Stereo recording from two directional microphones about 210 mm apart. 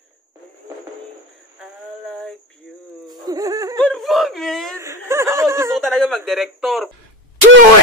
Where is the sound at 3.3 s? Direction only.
15° right (ahead or behind).